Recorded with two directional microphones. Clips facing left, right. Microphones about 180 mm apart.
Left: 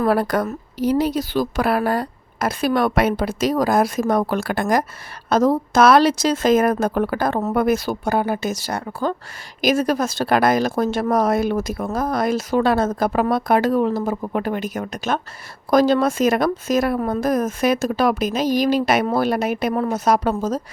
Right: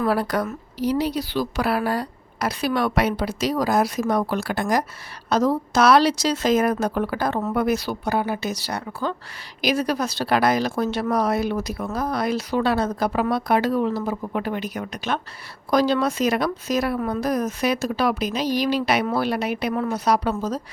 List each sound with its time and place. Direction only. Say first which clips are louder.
0.0 s a woman's voice: left 3 dB; 50° left (ahead or behind)